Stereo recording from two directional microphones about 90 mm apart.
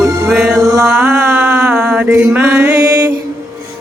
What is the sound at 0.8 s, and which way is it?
Mantra, 15° right (ahead or behind).